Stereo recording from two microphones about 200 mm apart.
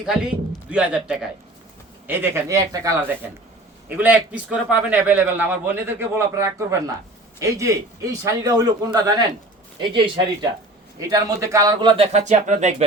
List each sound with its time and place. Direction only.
0.0 s a man's voice: 5° right (ahead or behind); by 9.2 s 20° right (ahead or behind)
11.1 s speech: 15° right (ahead or behind); by 12.7 s 35° right (ahead or behind)